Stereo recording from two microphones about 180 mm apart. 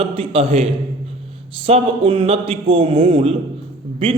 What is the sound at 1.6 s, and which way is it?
A man's voice, 30° right (ahead or behind).